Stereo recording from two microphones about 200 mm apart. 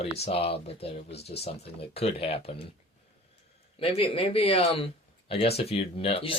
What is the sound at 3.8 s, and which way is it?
Speech, 30° left (ahead or behind).